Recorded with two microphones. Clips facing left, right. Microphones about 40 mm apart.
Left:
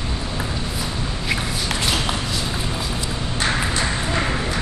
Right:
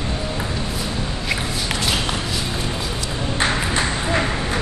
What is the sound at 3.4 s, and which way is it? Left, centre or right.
Ping, centre.